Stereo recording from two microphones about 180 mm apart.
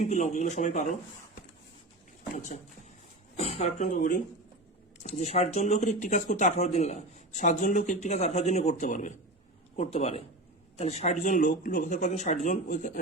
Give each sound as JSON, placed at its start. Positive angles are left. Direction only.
{"t": 0.0, "sound": "speech", "side_deg": 40}
{"t": 2.3, "sound": "speech", "side_deg": 45}